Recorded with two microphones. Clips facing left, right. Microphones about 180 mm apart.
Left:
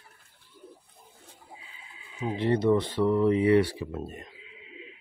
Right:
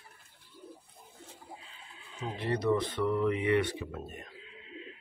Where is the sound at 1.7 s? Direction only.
5° left (ahead or behind).